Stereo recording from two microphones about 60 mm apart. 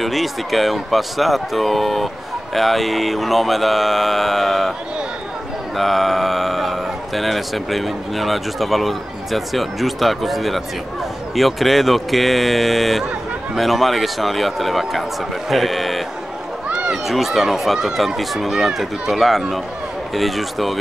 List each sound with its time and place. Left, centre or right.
0.0 s speech: centre
5.8 s speech: centre
16.6 s run: centre
16.9 s speech: centre